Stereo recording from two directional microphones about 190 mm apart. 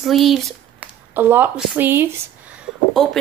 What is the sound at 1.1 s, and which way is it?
Speech, 10° right (ahead or behind).